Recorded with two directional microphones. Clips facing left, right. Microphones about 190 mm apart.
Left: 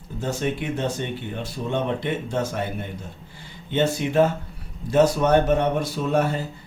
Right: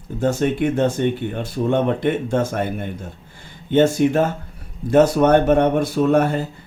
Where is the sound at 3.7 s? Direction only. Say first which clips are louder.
Right 7 dB; 45° right (ahead or behind).